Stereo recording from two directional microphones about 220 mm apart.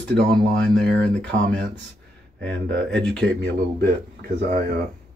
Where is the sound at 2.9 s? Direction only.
5° left (ahead or behind).